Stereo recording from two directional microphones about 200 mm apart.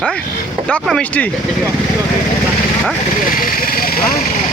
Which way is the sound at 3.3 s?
45° left (ahead or behind).